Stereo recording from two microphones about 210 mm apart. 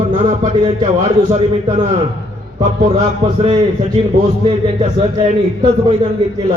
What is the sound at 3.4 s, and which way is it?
A man's voice, 30° right (ahead or behind).